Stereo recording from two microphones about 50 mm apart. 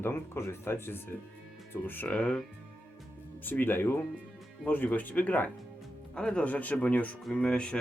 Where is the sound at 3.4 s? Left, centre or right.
Left.